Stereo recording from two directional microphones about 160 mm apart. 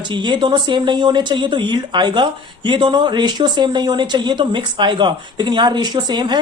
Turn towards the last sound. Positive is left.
turn(degrees=-30)  # may be behind; listen again after turning